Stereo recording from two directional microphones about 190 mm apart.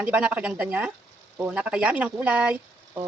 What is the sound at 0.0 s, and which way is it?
Speech, 5° right (ahead or behind).